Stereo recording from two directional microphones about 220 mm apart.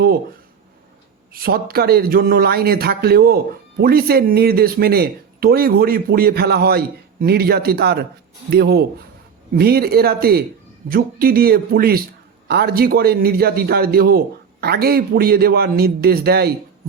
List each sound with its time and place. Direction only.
1.3 s speech: 45° right (ahead or behind)